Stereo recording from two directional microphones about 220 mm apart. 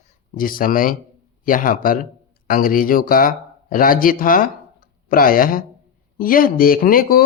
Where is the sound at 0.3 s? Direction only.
40° left (ahead or behind).